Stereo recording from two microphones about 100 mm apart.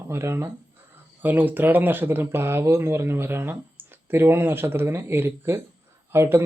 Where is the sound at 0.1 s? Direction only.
25° right (ahead or behind).